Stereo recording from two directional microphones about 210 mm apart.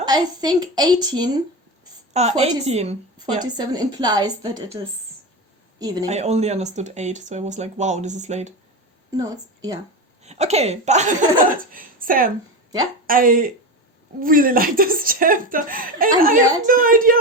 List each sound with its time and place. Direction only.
0.0 s a woman's voice: 20° right (ahead or behind)
2.1 s speech: 30° right (ahead or behind)
3.4 s a woman's voice: 20° right (ahead or behind)
5.8 s speech: 15° right (ahead or behind)
6.1 s speech: 30° right (ahead or behind)
9.1 s a woman's voice: 20° right (ahead or behind)
10.2 s speech: 30° right (ahead or behind)